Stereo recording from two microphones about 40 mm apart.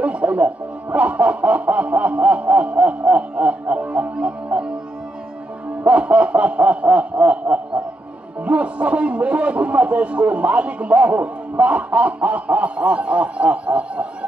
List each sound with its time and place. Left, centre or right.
0.0 s music: right
0.9 s a man's voice: right
5.9 s a man's voice: right